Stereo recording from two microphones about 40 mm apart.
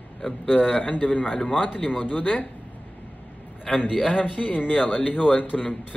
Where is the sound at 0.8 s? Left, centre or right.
Left.